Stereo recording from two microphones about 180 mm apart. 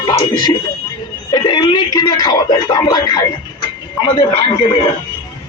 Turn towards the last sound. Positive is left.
turn(degrees=25)  # may be behind; listen again after turning